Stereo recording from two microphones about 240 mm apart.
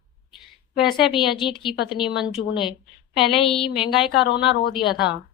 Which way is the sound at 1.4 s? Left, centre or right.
Centre.